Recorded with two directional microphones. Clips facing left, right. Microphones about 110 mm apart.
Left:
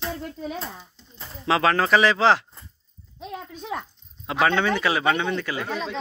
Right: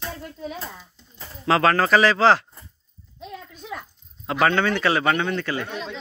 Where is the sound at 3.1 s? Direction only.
75° left (ahead or behind).